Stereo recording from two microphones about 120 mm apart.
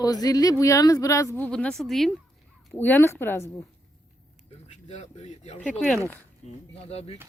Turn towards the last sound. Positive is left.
turn(degrees=60)  # may be behind; listen again after turning